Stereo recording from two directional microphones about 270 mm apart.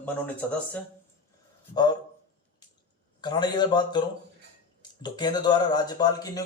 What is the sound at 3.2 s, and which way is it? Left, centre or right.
Speech, centre.